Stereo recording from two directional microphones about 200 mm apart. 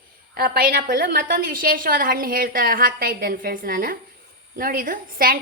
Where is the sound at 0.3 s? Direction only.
50° right (ahead or behind).